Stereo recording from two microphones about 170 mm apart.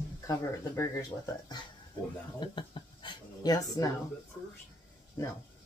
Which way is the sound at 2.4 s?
30° left (ahead or behind).